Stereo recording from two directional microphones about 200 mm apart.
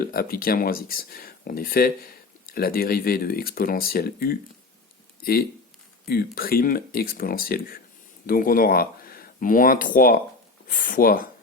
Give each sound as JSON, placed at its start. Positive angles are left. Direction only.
{"t": 0.0, "sound": "speech", "side_deg": 50}